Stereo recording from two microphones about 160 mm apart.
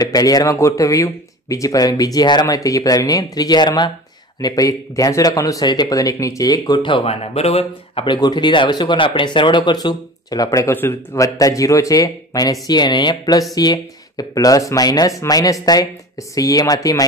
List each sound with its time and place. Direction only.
0.0 s speech: 25° left (ahead or behind)